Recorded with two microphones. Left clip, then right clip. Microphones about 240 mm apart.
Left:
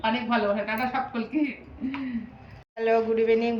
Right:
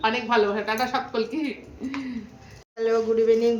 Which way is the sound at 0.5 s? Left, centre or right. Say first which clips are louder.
Right 2 dB; centre.